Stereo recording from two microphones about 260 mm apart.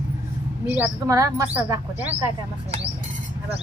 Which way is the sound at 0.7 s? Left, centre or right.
Centre.